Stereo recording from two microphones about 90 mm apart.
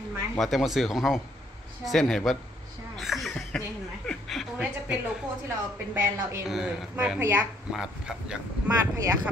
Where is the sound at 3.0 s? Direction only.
Centre (ahead or behind).